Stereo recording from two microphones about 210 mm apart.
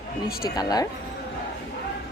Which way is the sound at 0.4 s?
20° left (ahead or behind).